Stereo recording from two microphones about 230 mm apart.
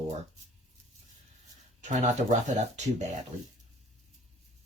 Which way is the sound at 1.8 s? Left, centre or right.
Right.